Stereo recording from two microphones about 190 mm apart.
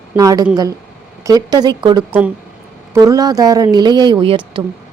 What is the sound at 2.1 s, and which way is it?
Speech, 5° right (ahead or behind).